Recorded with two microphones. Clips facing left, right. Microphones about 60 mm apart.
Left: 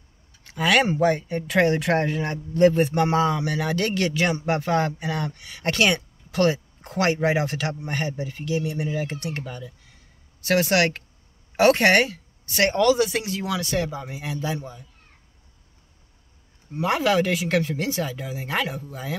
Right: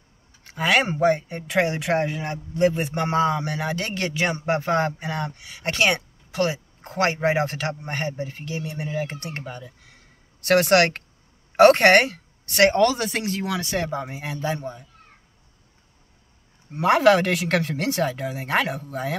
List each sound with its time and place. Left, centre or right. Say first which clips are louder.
0.4 s speech: left 1 dB; right
5.4 s speech: left 1 dB; centre
6.8 s speech: right 1 dB; right
9.8 s a sound: right 3 dB; right
11.5 s a woman's voice: right 3 dB; right
12.7 s a man's voice: left 1 dB; right
16.7 s speech: right 4 dB; right